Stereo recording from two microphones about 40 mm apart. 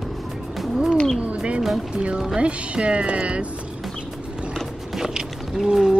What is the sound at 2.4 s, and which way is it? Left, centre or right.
Speech, right.